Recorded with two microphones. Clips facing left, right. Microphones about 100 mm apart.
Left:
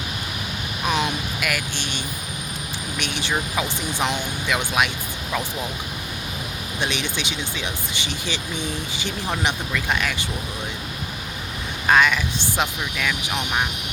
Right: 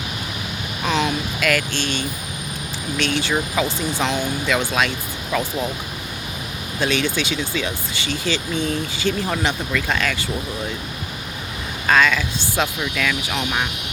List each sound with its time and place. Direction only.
0.9 s speech: 15° left (ahead or behind)
6.7 s speech: 20° left (ahead or behind)
11.9 s speech: 15° left (ahead or behind)